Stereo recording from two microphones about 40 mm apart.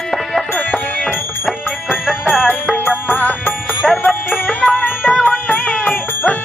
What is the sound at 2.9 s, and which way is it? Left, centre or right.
Music, left.